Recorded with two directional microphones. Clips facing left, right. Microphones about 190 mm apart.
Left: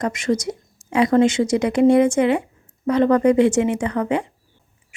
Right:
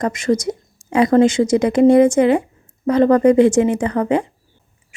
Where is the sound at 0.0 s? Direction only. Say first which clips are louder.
Right 3 dB; 40° right (ahead or behind).